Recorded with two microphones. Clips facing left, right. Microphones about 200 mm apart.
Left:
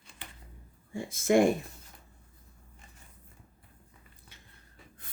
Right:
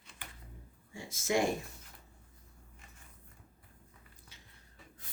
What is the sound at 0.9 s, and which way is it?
Speech, 55° left (ahead or behind).